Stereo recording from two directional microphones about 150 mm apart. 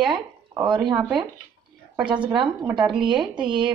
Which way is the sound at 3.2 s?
5° right (ahead or behind).